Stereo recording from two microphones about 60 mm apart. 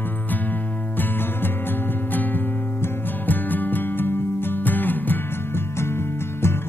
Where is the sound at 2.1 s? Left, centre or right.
Left.